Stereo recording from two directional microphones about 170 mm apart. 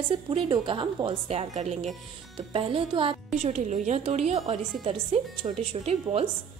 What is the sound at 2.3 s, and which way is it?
Speech, 30° right (ahead or behind).